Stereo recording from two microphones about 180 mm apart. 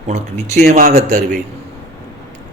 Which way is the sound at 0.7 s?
45° right (ahead or behind).